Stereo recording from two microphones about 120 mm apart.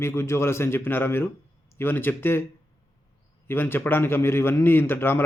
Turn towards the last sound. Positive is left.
turn(degrees=20)  # may be behind; listen again after turning